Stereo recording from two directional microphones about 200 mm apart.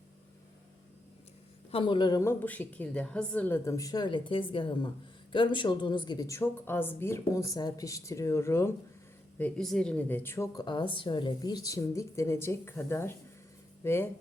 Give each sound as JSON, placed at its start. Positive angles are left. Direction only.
{"t": 1.7, "sound": "speech", "side_deg": 25}